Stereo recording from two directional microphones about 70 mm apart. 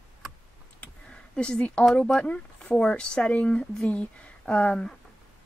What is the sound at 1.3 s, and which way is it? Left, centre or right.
Speech, centre.